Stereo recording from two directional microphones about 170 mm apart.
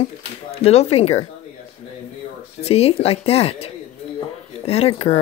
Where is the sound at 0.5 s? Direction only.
40° left (ahead or behind).